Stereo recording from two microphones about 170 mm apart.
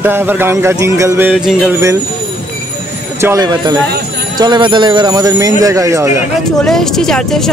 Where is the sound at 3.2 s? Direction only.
20° right (ahead or behind).